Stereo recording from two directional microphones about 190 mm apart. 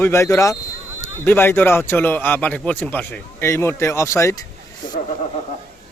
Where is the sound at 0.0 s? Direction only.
15° left (ahead or behind).